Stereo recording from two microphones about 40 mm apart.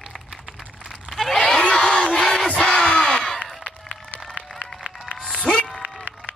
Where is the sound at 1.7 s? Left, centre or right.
Centre.